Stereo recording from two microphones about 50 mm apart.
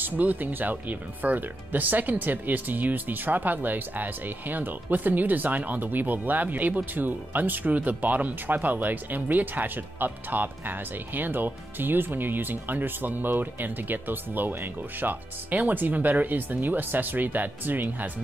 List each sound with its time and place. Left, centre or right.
0.0 s speech: right